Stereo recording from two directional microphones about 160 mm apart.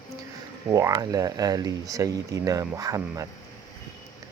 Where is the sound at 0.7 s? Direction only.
20° right (ahead or behind).